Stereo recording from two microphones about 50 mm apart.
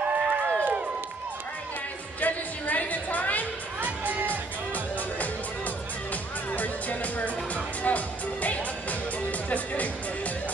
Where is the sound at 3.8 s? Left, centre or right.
Right.